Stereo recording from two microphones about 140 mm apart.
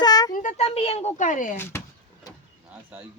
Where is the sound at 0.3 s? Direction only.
65° left (ahead or behind).